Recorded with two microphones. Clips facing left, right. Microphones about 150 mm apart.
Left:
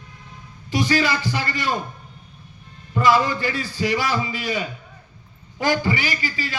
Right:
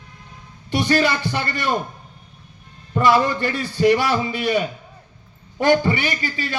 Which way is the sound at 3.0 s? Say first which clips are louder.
Right 1 dB; 60° right (ahead or behind).